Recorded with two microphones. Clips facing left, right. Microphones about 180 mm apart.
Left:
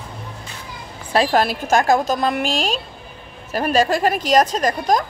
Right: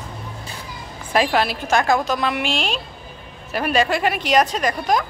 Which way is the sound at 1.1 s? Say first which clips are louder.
Left 2 dB; 40° left (ahead or behind).